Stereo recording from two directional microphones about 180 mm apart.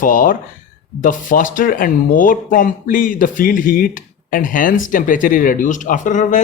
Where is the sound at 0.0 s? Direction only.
50° left (ahead or behind).